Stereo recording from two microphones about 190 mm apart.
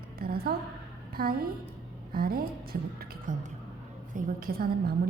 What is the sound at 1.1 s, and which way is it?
A woman's voice, 50° right (ahead or behind).